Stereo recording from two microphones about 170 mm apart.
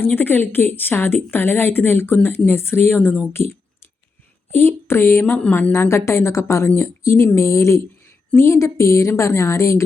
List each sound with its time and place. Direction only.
0.0 s a woman's voice: 10° left (ahead or behind)
4.5 s a woman's voice: 15° left (ahead or behind)